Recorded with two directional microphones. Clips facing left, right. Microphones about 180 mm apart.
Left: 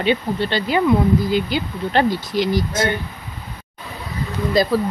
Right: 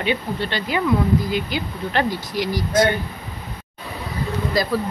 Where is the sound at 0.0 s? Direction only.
30° left (ahead or behind).